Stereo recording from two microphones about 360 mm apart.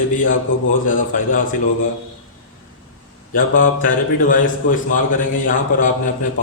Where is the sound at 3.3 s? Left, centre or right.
Left.